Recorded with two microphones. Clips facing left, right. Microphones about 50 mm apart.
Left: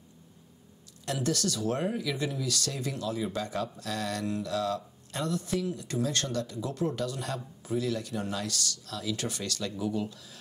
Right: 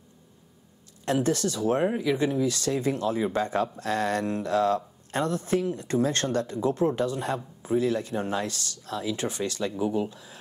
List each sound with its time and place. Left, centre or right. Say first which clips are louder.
1.0 s speech: right 5 dB; right